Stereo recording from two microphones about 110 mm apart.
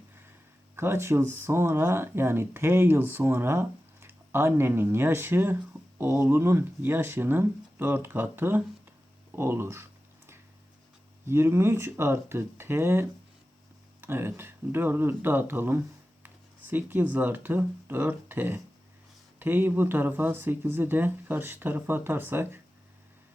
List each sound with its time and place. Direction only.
0.8 s speech: 25° right (ahead or behind)
6.0 s speech: 30° right (ahead or behind)
9.3 s a sound: 25° right (ahead or behind)
11.3 s speech: 25° right (ahead or behind)